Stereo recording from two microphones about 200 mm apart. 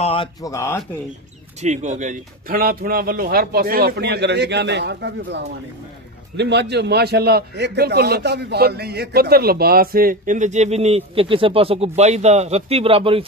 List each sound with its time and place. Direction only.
0.0 s speech: 25° left (ahead or behind)
1.6 s a man's voice: 35° right (ahead or behind)